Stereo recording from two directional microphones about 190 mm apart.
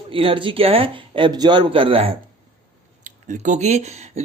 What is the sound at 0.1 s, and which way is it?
Speech, 30° right (ahead or behind).